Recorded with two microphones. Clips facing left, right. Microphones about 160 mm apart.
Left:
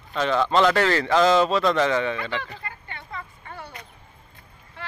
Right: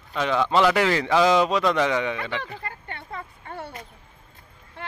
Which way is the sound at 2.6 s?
40° right (ahead or behind).